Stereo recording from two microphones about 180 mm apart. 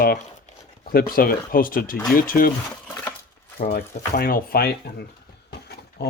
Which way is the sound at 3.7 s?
60° left (ahead or behind).